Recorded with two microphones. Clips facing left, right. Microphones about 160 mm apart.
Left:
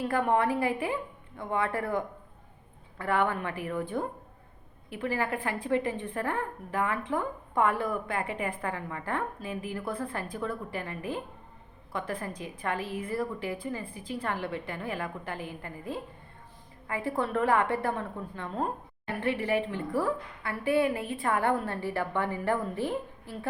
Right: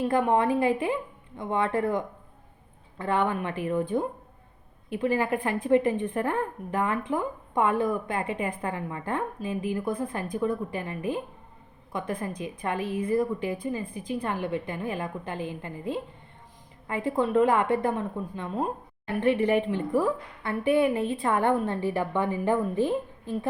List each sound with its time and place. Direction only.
0.0 s a woman's voice: 20° right (ahead or behind)